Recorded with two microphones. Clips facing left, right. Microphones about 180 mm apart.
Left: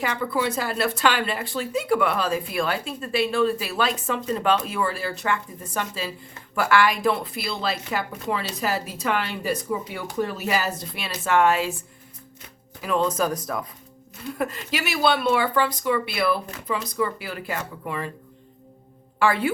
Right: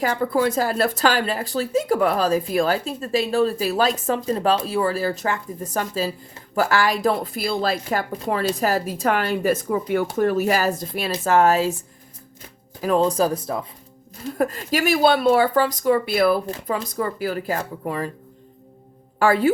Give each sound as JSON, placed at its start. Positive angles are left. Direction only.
{"t": 0.0, "sound": "speech", "side_deg": -45}
{"t": 12.8, "sound": "speech", "side_deg": -35}
{"t": 14.2, "sound": "speech", "side_deg": -40}
{"t": 19.2, "sound": "speech", "side_deg": -40}